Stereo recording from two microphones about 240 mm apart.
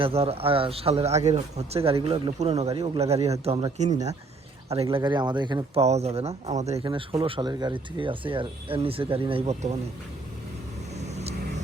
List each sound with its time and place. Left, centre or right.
0.0 s speech: right
10.9 s vehicle: right